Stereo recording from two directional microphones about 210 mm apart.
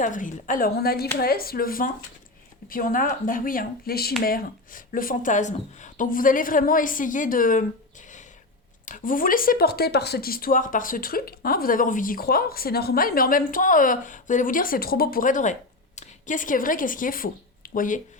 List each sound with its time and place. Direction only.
0.0 s speech: 40° left (ahead or behind)
8.9 s a woman's voice: 40° left (ahead or behind)